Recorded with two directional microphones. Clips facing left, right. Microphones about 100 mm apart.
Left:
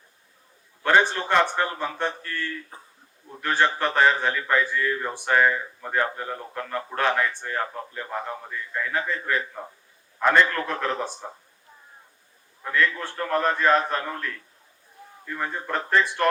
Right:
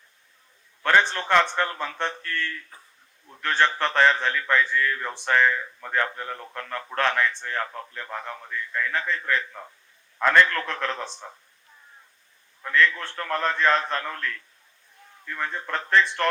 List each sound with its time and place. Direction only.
0.8 s speech: 15° left (ahead or behind)
12.6 s speech: 15° left (ahead or behind)